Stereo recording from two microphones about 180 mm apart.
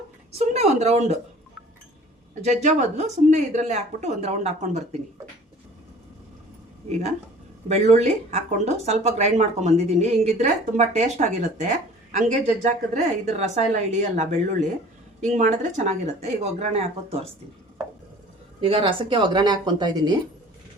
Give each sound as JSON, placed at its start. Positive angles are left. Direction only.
{"t": 0.3, "sound": "speech", "side_deg": -35}
{"t": 2.4, "sound": "speech", "side_deg": -40}
{"t": 7.7, "sound": "speech", "side_deg": -40}
{"t": 18.6, "sound": "speech", "side_deg": -30}